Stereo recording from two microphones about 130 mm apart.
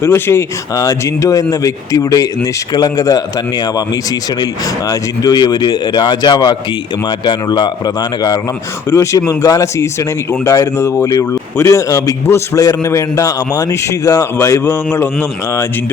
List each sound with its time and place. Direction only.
0.0 s a man's voice: 20° left (ahead or behind)